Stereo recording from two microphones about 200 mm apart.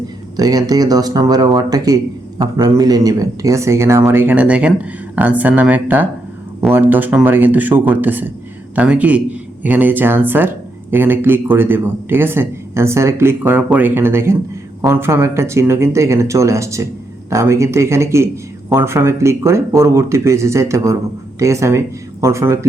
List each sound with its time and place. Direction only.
0.3 s speech: 20° right (ahead or behind)